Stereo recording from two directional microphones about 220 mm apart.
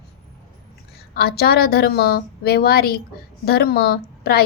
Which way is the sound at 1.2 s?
45° left (ahead or behind).